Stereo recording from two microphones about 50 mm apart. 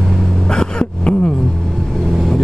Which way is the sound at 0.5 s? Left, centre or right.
Centre.